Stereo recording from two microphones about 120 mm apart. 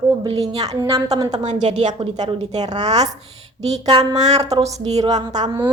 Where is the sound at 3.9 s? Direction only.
35° right (ahead or behind).